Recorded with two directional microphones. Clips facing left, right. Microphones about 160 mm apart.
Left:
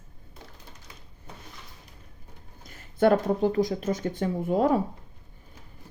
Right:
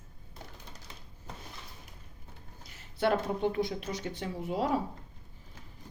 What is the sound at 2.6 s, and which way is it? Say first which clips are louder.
Speech: left 8 dB; 50° left (ahead or behind).